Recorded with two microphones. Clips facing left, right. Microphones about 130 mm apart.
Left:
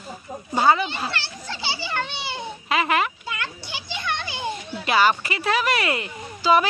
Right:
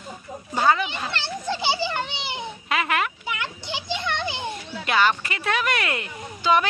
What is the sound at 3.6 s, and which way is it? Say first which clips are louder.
Children playing: right 3 dB; 20° right (ahead or behind).